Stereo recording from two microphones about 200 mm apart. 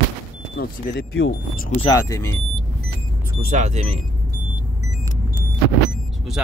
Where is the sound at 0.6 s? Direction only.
55° left (ahead or behind).